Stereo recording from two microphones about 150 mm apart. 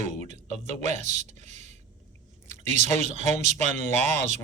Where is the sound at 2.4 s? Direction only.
50° right (ahead or behind).